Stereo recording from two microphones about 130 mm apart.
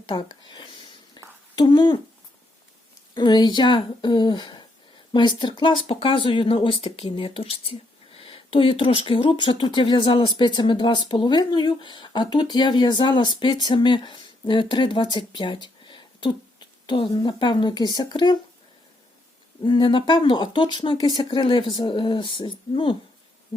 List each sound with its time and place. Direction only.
0.0 s speech: 35° left (ahead or behind)
3.2 s speech: 35° left (ahead or behind)
19.6 s speech: 35° left (ahead or behind)
23.5 s hoot: 40° left (ahead or behind)